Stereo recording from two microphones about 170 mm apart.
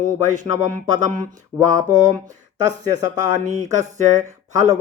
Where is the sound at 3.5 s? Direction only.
45° right (ahead or behind).